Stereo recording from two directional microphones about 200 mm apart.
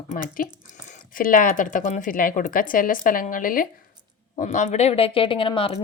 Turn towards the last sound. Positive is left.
turn(degrees=25)  # may be behind; listen again after turning